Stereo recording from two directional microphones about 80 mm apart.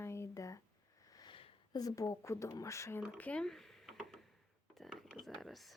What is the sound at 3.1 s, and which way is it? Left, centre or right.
Speech, centre.